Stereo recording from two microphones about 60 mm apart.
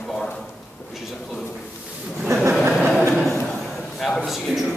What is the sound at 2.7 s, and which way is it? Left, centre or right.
Chuckle, centre.